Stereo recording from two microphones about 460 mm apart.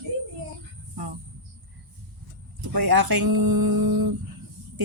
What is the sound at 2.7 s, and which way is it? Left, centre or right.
Speech, right.